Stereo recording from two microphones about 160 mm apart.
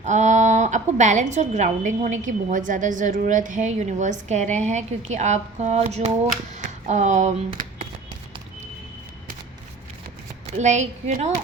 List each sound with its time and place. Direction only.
0.0 s a woman's voice: 50° right (ahead or behind)
10.6 s a woman's voice: 45° right (ahead or behind)